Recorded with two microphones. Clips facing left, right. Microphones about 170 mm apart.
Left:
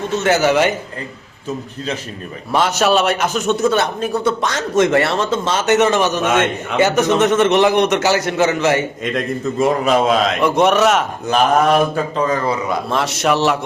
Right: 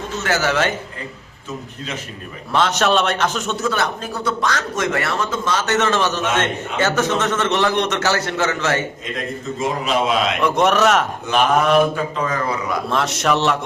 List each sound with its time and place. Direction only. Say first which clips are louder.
0.2 s a man's voice: left 5 dB; 20° left (ahead or behind)
2.5 s a man's voice: left 2 dB; 10° left (ahead or behind)
9.8 s a man's voice: left 4 dB; 40° left (ahead or behind)
10.4 s speech: left 2 dB; centre (ahead or behind)
11.3 s a man's voice: left 3 dB; 40° left (ahead or behind)
12.9 s speech: left 1 dB; centre (ahead or behind)